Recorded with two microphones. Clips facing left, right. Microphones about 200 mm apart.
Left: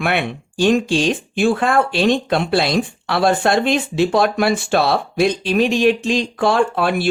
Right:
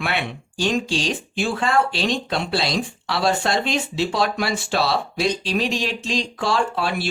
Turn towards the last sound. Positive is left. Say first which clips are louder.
# left 6 dB
turn(degrees=55)  # may be behind; listen again after turning